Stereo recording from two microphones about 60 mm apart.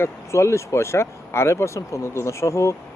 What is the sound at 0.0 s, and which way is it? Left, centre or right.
Speech, left.